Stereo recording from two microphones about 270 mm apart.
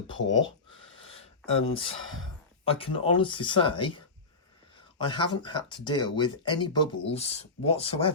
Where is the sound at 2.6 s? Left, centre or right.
Centre.